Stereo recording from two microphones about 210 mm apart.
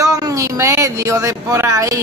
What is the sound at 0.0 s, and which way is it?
A woman's voice, 15° right (ahead or behind).